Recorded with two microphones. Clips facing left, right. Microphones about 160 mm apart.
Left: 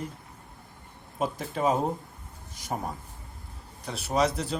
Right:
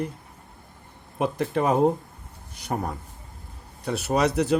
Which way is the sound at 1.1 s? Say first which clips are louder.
Right 6 dB; 65° right (ahead or behind).